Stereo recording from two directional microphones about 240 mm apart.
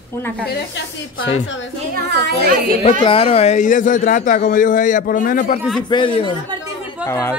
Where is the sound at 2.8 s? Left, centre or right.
Left.